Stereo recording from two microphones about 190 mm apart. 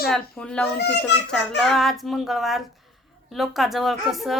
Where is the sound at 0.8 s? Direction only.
60° left (ahead or behind).